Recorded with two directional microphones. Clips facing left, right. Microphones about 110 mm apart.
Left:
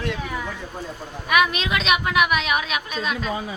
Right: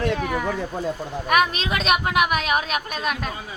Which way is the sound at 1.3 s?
40° right (ahead or behind).